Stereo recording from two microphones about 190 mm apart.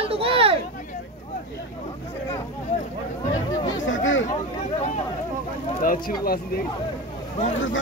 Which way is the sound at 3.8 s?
80° left.